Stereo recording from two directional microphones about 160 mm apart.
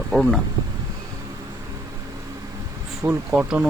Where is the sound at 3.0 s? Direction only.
10° right (ahead or behind).